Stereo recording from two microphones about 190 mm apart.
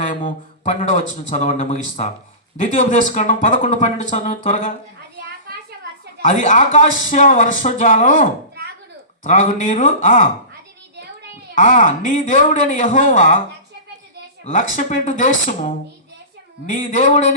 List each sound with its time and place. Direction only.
0.3 s speech: 45° left (ahead or behind)
6.2 s speech: 40° left (ahead or behind)
11.5 s speech: 45° left (ahead or behind)
14.5 s speech: 45° left (ahead or behind)